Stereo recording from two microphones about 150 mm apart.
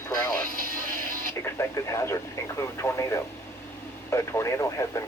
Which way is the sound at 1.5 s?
20° left (ahead or behind).